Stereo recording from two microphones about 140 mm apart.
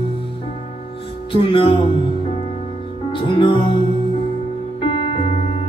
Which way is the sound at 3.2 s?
35° left (ahead or behind).